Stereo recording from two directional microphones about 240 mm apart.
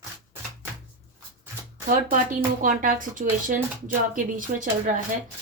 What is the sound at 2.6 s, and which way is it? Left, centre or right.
Speech, right.